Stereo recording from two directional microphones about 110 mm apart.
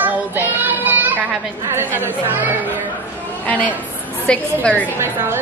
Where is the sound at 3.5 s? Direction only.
15° left (ahead or behind).